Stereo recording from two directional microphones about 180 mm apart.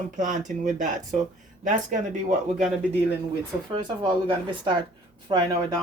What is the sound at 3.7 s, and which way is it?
Speech, 30° right (ahead or behind).